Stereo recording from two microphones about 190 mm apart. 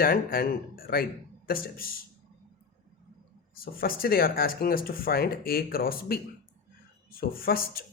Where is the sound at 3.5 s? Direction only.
50° left (ahead or behind).